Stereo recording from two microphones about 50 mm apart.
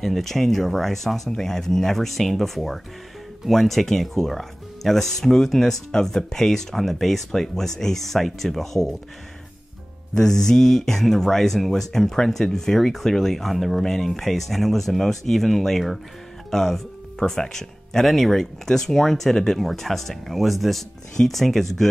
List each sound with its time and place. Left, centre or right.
0.0 s speech: centre
10.1 s speech: centre